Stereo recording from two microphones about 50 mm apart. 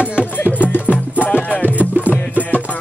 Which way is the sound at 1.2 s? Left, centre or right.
Left.